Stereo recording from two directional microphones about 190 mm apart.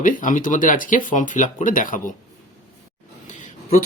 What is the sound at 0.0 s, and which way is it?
Speech, 45° left (ahead or behind).